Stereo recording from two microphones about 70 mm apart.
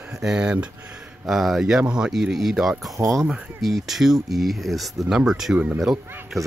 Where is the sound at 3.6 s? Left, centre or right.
Centre.